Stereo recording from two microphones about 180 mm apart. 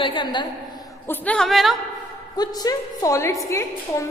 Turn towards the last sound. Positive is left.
turn(degrees=15)  # may be behind; listen again after turning